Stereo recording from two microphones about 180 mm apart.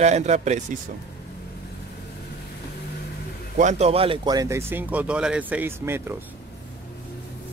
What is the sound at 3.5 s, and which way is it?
Speech, 40° right (ahead or behind).